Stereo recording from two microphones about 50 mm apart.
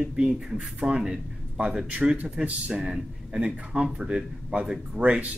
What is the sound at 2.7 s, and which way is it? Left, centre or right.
Speech, centre.